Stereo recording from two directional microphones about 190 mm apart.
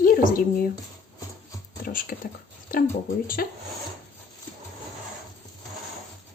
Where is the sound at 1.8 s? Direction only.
45° left (ahead or behind).